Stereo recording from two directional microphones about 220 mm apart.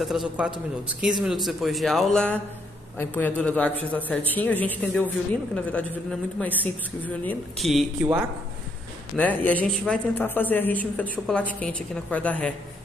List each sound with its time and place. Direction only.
0.0 s a woman's voice: centre (ahead or behind)